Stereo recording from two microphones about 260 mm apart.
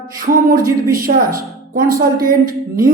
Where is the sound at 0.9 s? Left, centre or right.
Right.